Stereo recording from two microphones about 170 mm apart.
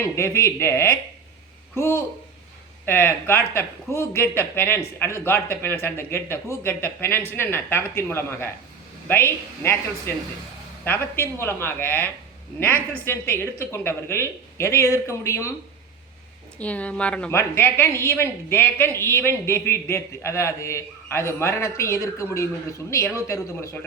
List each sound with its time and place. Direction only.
0.0 s a woman's voice: 15° left (ahead or behind)
10.8 s a woman's voice: 15° left (ahead or behind)
16.6 s a woman's voice: 10° left (ahead or behind)